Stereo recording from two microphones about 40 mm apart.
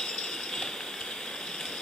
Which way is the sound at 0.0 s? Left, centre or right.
Centre.